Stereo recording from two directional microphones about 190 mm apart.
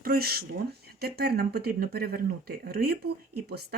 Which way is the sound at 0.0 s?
50° right (ahead or behind).